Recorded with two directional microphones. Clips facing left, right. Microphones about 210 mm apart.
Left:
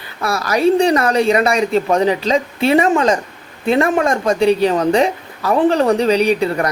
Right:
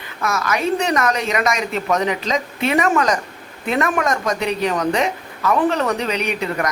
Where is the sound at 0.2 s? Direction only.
35° left (ahead or behind).